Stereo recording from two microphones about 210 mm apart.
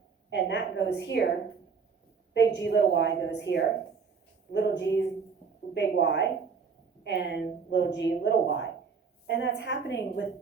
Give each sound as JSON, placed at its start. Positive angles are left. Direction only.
{"t": 0.3, "sound": "a woman's voice", "side_deg": 55}
{"t": 2.3, "sound": "a woman's voice", "side_deg": 55}